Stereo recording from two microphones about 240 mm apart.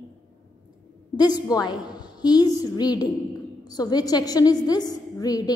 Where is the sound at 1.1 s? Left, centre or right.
Centre.